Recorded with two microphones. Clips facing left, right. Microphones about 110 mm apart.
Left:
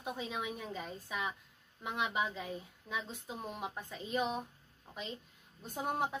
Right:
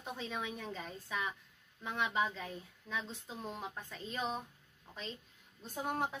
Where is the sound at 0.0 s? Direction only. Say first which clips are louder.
Left 2 dB; 10° left (ahead or behind).